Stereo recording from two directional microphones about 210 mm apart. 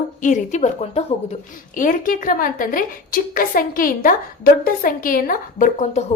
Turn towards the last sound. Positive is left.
turn(degrees=35)  # may be behind; listen again after turning